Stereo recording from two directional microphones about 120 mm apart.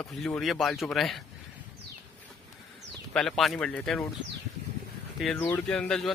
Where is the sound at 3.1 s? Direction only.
5° left (ahead or behind).